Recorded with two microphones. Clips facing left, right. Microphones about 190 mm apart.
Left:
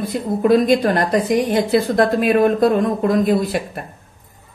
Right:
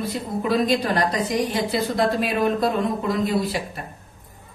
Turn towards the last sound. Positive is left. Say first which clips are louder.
# left 6 dB
turn(degrees=55)  # may be behind; listen again after turning